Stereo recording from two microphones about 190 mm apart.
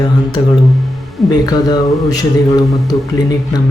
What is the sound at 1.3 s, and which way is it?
Speech, 20° left (ahead or behind).